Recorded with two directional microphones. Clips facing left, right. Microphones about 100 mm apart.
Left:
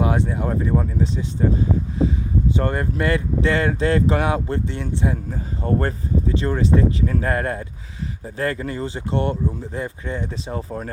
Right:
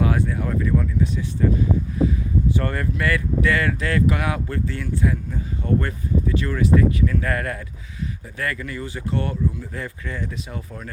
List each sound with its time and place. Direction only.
0.0 s speech: 25° left (ahead or behind)
5.1 s speech: 35° left (ahead or behind)